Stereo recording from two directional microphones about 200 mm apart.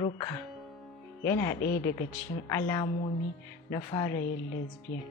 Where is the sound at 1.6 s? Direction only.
50° left (ahead or behind).